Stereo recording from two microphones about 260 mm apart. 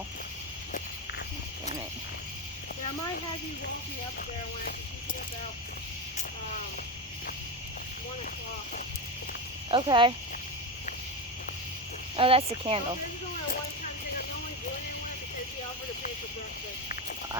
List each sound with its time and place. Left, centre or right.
9.6 s speech: centre
12.1 s speech: right